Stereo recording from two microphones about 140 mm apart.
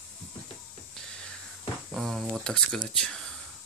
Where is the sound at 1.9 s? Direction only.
Centre (ahead or behind).